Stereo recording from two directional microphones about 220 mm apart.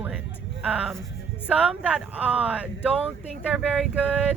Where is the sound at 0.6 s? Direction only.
5° right (ahead or behind).